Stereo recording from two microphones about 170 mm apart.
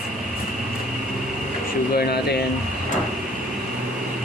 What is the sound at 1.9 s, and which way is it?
Speech, 65° left (ahead or behind).